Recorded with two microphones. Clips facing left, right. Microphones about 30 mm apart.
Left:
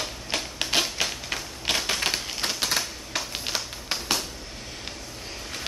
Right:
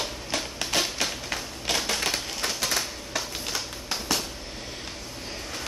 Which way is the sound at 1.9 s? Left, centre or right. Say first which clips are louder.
Left 1 dB; centre.